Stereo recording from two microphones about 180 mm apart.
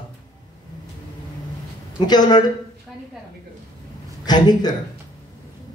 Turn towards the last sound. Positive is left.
turn(degrees=25)  # may be behind; listen again after turning